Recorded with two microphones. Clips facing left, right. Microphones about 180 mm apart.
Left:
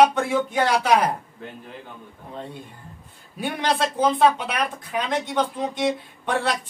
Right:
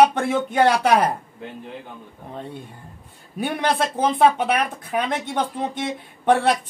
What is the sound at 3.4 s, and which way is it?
Speech, 55° right (ahead or behind).